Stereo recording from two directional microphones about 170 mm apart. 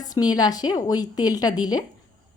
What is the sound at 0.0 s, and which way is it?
A woman's voice, 25° left (ahead or behind).